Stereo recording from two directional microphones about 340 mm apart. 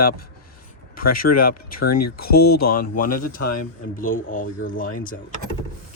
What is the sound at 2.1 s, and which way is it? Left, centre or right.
Speech, left.